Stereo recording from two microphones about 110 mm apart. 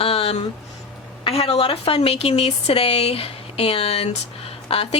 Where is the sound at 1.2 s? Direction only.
65° left (ahead or behind).